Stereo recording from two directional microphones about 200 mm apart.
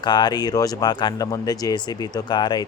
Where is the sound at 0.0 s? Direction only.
20° left (ahead or behind).